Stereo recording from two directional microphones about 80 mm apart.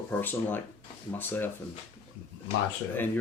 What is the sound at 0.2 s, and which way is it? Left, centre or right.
Speech, left.